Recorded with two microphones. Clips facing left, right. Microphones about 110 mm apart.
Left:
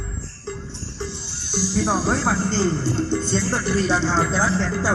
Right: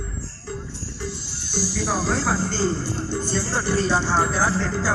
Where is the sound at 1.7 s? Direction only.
20° left (ahead or behind).